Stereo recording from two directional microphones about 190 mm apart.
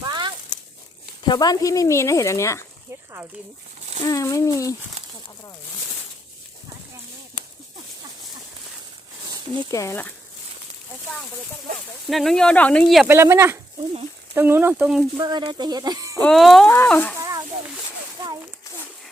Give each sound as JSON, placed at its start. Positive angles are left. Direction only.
{"t": 0.0, "sound": "a sound", "side_deg": -20}
{"t": 1.2, "sound": "speech", "side_deg": 20}
{"t": 4.0, "sound": "speech", "side_deg": 15}
{"t": 9.7, "sound": "speech", "side_deg": 15}
{"t": 12.0, "sound": "speech", "side_deg": 0}
{"t": 13.1, "sound": "speech", "side_deg": -15}
{"t": 15.2, "sound": "speech", "side_deg": -25}
{"t": 16.2, "sound": "speech", "side_deg": 0}
{"t": 16.6, "sound": "speech", "side_deg": 10}
{"t": 17.2, "sound": "a sound", "side_deg": -15}